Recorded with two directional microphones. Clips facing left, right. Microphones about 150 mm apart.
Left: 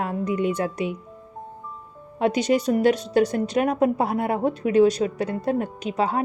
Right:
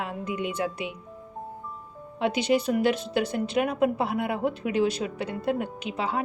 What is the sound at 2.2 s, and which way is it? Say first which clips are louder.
A woman's voice: left 3 dB; 40° left (ahead or behind).